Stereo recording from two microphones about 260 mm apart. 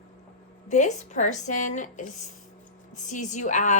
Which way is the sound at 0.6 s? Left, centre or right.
Left.